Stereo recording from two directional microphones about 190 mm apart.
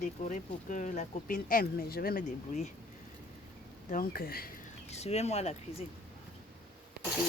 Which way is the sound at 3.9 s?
50° left (ahead or behind).